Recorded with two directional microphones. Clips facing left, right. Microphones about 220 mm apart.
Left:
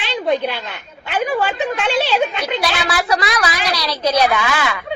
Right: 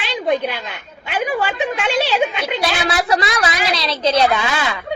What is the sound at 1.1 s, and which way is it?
A woman's voice, 10° right (ahead or behind).